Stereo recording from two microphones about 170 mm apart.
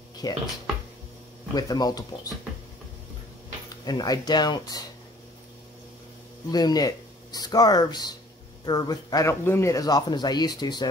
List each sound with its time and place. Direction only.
0.2 s speech: 20° left (ahead or behind)
1.5 s speech: 20° left (ahead or behind)
3.8 s speech: 20° left (ahead or behind)
6.5 s speech: 20° left (ahead or behind)